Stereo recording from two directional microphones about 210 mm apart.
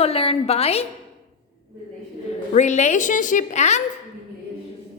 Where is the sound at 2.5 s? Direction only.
35° left (ahead or behind).